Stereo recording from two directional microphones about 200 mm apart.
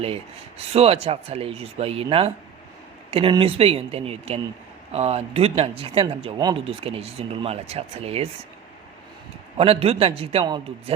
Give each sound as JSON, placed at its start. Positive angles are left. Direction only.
{"t": 0.7, "sound": "speech", "side_deg": -30}
{"t": 9.6, "sound": "speech", "side_deg": -30}